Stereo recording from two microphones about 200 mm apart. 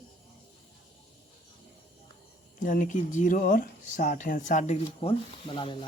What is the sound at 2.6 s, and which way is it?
Speech, 40° left (ahead or behind).